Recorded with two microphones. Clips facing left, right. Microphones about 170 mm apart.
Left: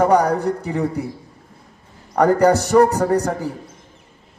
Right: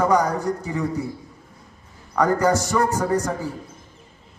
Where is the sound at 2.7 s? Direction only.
35° left (ahead or behind).